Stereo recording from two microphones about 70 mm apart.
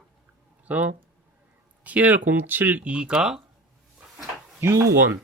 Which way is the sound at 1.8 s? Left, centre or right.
Right.